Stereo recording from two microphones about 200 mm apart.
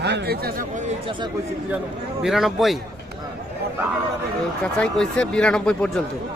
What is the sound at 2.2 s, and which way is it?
Speech, centre (ahead or behind).